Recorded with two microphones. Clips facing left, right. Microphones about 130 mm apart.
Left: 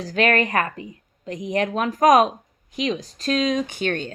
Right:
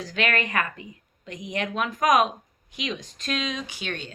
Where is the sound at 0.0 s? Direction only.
35° left (ahead or behind).